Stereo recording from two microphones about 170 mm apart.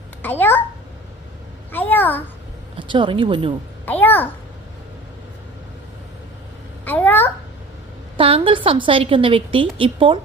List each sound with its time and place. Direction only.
0.2 s a child's voice: 10° left (ahead or behind)
1.7 s a child's voice: 10° left (ahead or behind)
2.7 s speech: 30° right (ahead or behind)
3.8 s a child's voice: 10° left (ahead or behind)
6.8 s a sound: 10° left (ahead or behind)
8.1 s a woman's voice: 35° right (ahead or behind)